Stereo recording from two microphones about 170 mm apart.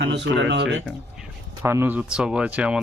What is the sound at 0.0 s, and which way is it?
Speech, 90° right.